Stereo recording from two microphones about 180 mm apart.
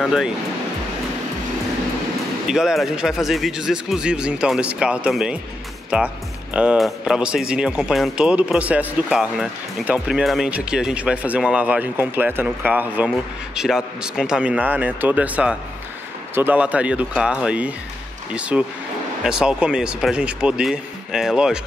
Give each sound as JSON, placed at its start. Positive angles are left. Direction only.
{"t": 0.0, "sound": "speech", "side_deg": -5}
{"t": 2.4, "sound": "speech", "side_deg": -5}